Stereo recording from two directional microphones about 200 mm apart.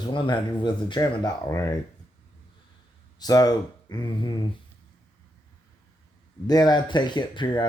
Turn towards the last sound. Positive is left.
turn(degrees=20)  # may be behind; listen again after turning